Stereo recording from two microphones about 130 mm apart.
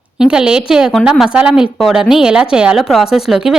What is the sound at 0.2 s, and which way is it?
A woman's voice, 5° right (ahead or behind).